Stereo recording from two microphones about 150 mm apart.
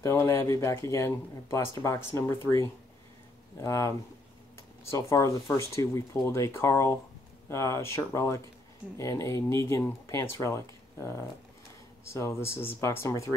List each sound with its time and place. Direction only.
0.0 s speech: 20° left (ahead or behind)
4.9 s speech: 20° left (ahead or behind)